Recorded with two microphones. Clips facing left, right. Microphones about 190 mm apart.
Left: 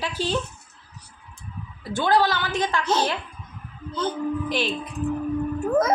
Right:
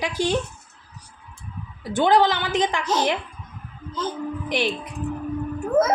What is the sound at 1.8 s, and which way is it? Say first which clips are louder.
A woman's voice: right 3 dB; 20° right (ahead or behind).